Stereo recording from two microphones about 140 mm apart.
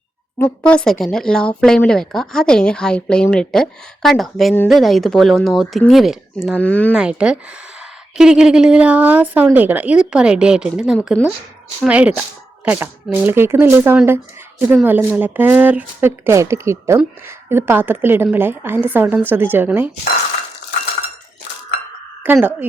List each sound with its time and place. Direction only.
0.6 s speech: 5° left (ahead or behind)
6.6 s speech: 10° left (ahead or behind)
6.9 s speech: 5° right (ahead or behind)
22.2 s speech: 10° right (ahead or behind)